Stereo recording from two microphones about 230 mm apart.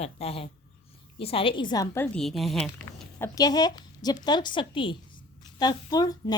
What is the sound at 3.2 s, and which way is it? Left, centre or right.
Speech, centre.